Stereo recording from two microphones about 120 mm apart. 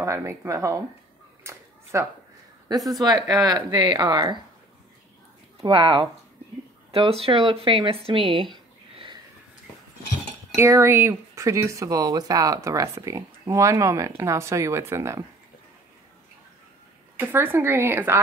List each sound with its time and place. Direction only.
0.0 s speech: 25° right (ahead or behind)
1.4 s a sound: 25° right (ahead or behind)
2.7 s speech: 30° right (ahead or behind)
5.6 s speech: 45° right (ahead or behind)
10.5 s speech: 20° right (ahead or behind)
17.2 s speech: 15° right (ahead or behind)